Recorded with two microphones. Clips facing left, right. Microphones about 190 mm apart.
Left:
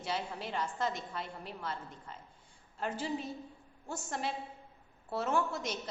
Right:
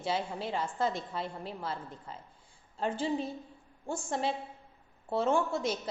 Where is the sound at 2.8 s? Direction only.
30° right (ahead or behind).